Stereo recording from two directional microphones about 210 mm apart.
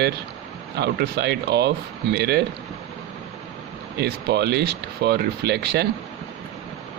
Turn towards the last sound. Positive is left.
turn(degrees=-50)  # may be behind; listen again after turning